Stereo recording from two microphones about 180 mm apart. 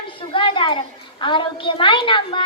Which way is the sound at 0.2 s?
30° left (ahead or behind).